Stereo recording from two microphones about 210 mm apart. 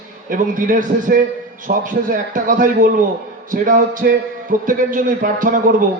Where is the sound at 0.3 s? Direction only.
40° right (ahead or behind).